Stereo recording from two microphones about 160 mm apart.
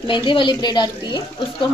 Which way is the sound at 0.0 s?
30° left (ahead or behind).